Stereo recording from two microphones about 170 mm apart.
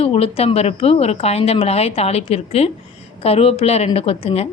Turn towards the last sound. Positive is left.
turn(degrees=35)  # may be behind; listen again after turning